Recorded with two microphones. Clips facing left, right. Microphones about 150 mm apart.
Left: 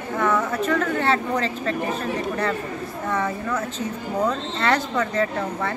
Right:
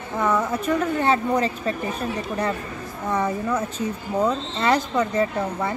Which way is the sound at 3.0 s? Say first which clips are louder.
Right 2 dB; 15° right (ahead or behind).